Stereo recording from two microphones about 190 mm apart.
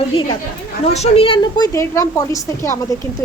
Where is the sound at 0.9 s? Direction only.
35° left (ahead or behind).